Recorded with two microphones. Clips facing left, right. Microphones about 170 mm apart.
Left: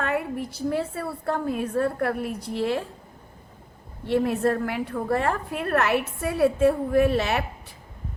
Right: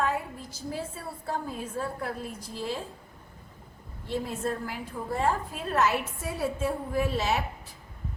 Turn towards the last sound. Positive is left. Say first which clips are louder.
# left 7 dB
turn(degrees=65)  # may be behind; listen again after turning